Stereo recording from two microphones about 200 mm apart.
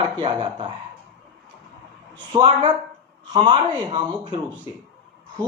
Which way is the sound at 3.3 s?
25° right (ahead or behind).